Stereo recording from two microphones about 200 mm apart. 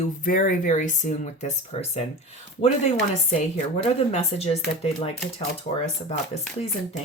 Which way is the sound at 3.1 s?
35° left (ahead or behind).